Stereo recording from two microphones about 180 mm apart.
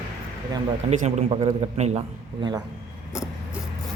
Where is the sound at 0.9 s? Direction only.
40° right (ahead or behind).